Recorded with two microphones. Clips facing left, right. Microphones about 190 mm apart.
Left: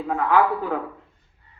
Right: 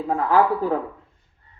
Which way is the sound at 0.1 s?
35° right (ahead or behind).